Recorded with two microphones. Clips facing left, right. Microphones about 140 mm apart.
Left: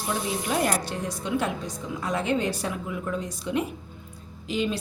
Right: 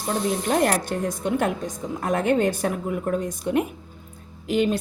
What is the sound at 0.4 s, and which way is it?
A woman's voice, 50° right (ahead or behind).